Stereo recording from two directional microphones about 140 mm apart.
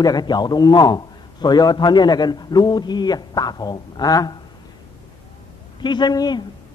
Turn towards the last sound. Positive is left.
turn(degrees=30)  # may be behind; listen again after turning